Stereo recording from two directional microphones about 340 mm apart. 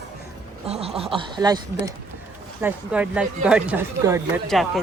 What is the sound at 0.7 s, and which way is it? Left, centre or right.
Speech, centre.